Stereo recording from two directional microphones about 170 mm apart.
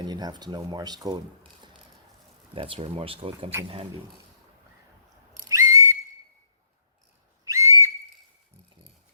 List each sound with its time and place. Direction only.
0.0 s speech: 25° right (ahead or behind)
2.6 s speech: 30° right (ahead or behind)
5.5 s whistle: 20° right (ahead or behind)
7.4 s whistle: 20° right (ahead or behind)